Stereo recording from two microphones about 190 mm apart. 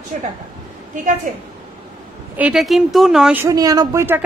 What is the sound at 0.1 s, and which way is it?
A woman's voice, 40° right (ahead or behind).